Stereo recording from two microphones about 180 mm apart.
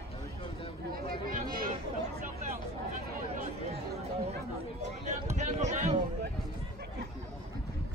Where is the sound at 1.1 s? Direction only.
55° right (ahead or behind).